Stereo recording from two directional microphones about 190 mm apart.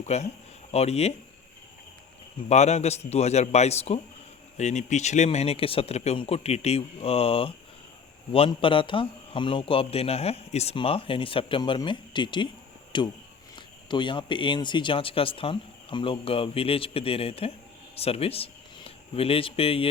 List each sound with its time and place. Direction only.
0.0 s speech: 35° left (ahead or behind)
2.5 s a man's voice: 35° left (ahead or behind)